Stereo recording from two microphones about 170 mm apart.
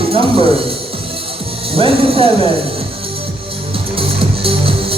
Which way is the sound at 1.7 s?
35° right (ahead or behind).